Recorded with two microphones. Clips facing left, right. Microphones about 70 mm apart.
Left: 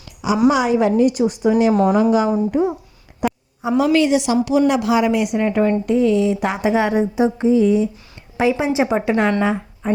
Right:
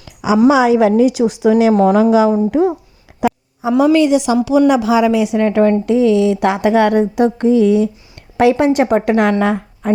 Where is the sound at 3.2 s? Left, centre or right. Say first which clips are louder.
Right 5 dB; right.